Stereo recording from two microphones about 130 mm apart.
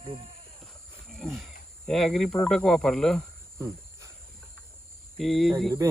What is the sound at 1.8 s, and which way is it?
Speech, 5° left (ahead or behind).